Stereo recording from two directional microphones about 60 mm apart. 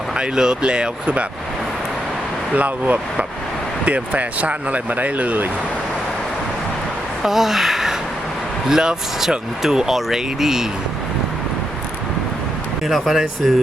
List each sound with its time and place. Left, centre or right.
0.1 s speech: centre
2.5 s speech: right
7.2 s speech: centre
12.9 s speech: centre